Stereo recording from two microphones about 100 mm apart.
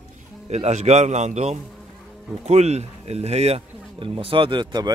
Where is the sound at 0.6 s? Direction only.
90° right.